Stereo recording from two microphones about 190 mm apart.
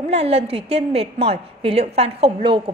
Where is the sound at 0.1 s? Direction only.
35° right (ahead or behind).